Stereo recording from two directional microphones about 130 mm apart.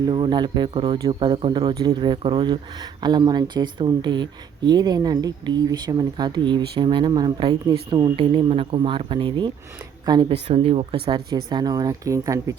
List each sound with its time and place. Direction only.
0.1 s speech: 40° right (ahead or behind)